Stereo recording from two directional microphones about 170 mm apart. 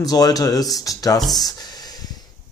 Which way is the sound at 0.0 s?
20° left (ahead or behind).